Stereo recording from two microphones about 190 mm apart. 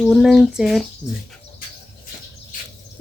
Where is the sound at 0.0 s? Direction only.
Centre (ahead or behind).